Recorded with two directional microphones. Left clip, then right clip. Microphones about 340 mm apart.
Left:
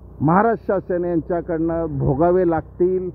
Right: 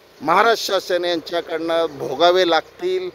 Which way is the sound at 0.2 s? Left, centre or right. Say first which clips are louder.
Right 2 dB; centre.